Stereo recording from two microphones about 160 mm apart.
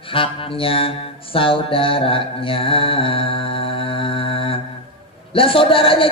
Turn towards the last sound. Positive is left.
turn(degrees=35)  # may be behind; listen again after turning